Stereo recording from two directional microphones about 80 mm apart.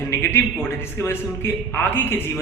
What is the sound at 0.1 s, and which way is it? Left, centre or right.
A man's voice, left.